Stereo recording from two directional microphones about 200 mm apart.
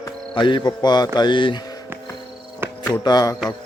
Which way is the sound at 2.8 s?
20° left (ahead or behind).